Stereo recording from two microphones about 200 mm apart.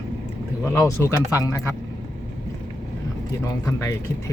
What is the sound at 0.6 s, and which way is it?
Speech, 10° left (ahead or behind).